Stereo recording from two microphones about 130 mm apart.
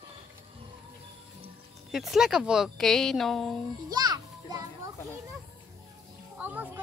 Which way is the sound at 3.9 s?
30° right (ahead or behind).